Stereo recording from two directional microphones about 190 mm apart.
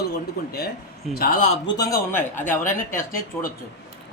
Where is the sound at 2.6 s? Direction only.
45° left (ahead or behind).